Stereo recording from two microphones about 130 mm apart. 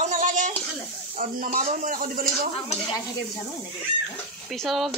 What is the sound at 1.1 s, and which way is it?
A man's voice, 90° right.